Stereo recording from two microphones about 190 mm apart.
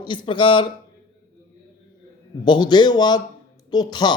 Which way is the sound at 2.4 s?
25° left (ahead or behind).